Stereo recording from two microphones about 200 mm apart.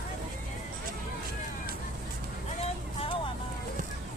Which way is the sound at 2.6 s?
25° left (ahead or behind).